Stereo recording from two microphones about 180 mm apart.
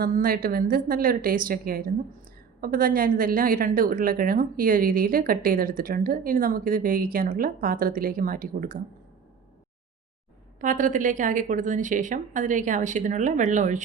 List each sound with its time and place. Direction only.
0.0 s a woman's voice: 55° right (ahead or behind)
10.6 s a woman's voice: 45° right (ahead or behind)